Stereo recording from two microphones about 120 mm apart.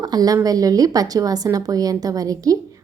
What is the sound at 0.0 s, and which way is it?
A woman's voice, 35° right (ahead or behind).